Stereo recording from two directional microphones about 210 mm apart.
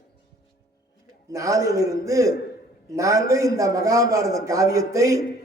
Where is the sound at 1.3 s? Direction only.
15° right (ahead or behind).